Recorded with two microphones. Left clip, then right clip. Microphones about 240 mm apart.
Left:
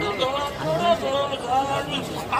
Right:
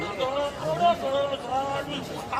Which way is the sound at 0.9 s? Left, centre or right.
Left.